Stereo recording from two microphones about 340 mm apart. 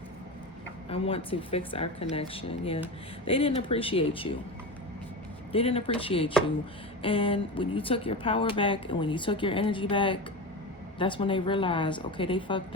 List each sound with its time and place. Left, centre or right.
0.9 s speech: centre
5.5 s speech: centre